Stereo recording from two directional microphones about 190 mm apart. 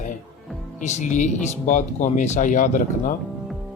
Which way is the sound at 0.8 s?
40° left (ahead or behind).